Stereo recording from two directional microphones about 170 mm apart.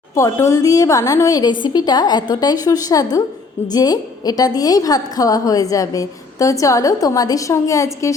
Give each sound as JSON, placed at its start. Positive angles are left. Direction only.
{"t": 0.1, "sound": "a woman's voice", "side_deg": 15}